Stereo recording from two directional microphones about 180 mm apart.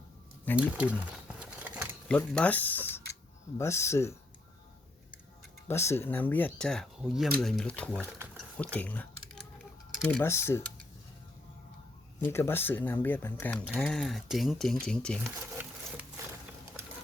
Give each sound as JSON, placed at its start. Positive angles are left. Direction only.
{"t": 0.5, "sound": "speech", "side_deg": -5}
{"t": 1.0, "sound": "patter", "side_deg": -5}
{"t": 2.0, "sound": "speech", "side_deg": 5}
{"t": 5.6, "sound": "speech", "side_deg": 15}
{"t": 8.4, "sound": "typing", "side_deg": 5}
{"t": 10.1, "sound": "speech", "side_deg": 10}
{"t": 12.2, "sound": "speech", "side_deg": 15}